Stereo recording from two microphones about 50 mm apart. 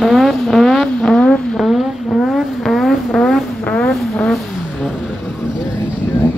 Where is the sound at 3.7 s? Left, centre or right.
Left.